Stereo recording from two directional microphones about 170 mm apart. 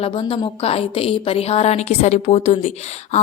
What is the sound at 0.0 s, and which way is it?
A woman's voice, 35° left (ahead or behind).